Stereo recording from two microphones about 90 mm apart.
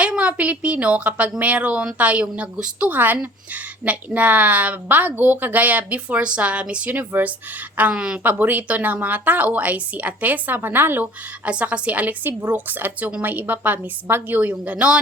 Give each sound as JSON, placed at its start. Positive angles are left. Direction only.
{"t": 0.0, "sound": "a woman's voice", "side_deg": -15}
{"t": 8.2, "sound": "a woman's voice", "side_deg": -20}